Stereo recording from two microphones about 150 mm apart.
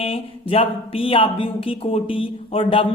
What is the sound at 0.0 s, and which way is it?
A woman's voice, 40° left (ahead or behind).